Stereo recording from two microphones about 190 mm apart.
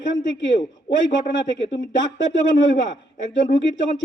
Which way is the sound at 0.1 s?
75° left (ahead or behind).